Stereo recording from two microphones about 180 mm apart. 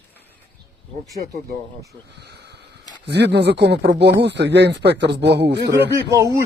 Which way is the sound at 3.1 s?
70° right (ahead or behind).